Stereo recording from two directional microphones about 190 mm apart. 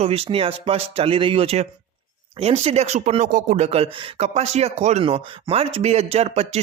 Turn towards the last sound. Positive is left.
turn(degrees=-35)  # may be behind; listen again after turning